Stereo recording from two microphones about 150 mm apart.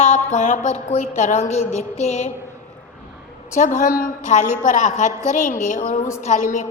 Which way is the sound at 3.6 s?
60° left (ahead or behind).